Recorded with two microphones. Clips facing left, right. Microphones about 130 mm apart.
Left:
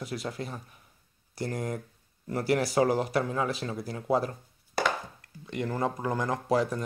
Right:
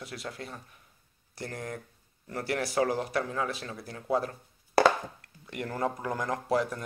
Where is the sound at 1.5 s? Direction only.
15° left (ahead or behind).